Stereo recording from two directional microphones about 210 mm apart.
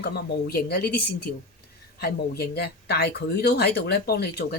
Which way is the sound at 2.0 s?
50° left (ahead or behind).